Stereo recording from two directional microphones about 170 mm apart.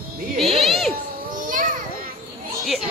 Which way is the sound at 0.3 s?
Centre (ahead or behind).